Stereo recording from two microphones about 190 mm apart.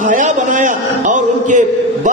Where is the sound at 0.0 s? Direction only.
45° right (ahead or behind).